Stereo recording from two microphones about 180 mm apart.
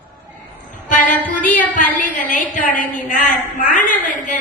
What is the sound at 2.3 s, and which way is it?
A woman's voice, 45° left (ahead or behind).